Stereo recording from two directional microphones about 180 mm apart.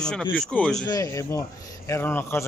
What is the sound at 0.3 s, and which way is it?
Speech, 5° left (ahead or behind).